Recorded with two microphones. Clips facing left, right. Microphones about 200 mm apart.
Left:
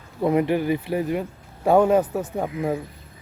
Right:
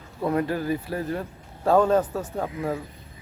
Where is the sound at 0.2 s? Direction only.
20° left (ahead or behind).